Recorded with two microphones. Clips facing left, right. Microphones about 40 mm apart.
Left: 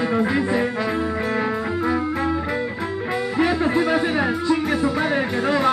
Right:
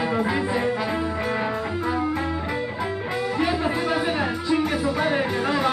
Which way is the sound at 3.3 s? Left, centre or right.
Centre.